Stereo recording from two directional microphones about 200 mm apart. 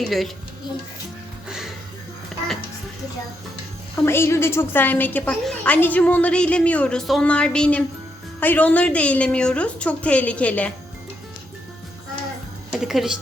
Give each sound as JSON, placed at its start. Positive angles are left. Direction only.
{"t": 0.0, "sound": "speech", "side_deg": 0}
{"t": 1.5, "sound": "music", "side_deg": 0}
{"t": 4.0, "sound": "a woman's voice", "side_deg": 10}
{"t": 12.7, "sound": "speech", "side_deg": 0}